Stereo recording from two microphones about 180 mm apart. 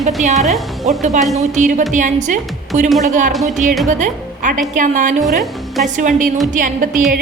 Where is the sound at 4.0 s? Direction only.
45° right (ahead or behind).